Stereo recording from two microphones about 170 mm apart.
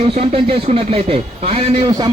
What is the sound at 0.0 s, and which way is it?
Speech, 35° right (ahead or behind).